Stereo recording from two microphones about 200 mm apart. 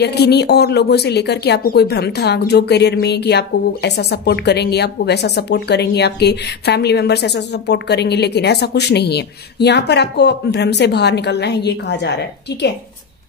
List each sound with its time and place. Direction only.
0.0 s speech: 55° left (ahead or behind)